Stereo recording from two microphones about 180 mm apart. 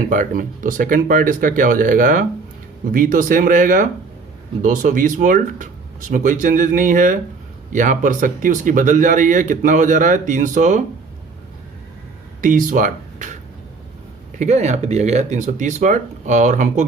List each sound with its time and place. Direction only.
0.1 s speech: 45° right (ahead or behind)
12.4 s speech: 50° right (ahead or behind)
14.3 s speech: 40° right (ahead or behind)